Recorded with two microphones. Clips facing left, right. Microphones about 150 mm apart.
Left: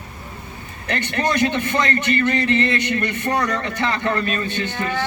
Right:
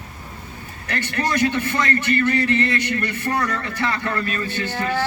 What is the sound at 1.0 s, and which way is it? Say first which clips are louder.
A man's voice: left 1 dB; 20° left (ahead or behind).